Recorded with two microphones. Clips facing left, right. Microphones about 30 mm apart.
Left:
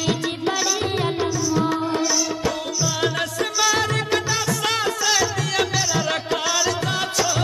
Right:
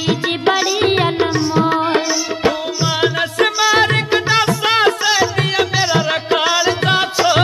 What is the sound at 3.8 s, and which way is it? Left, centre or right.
Music, right.